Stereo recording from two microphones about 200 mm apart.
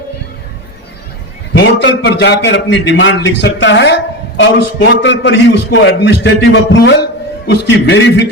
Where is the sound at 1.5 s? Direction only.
65° left (ahead or behind).